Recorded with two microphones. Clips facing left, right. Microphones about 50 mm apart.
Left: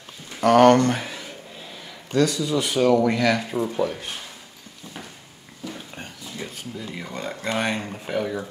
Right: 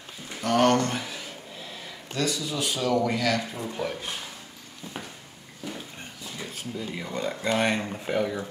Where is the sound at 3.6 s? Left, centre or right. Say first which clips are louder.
Left 9 dB; left.